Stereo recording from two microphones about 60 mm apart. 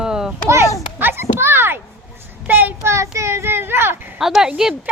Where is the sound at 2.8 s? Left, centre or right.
Right.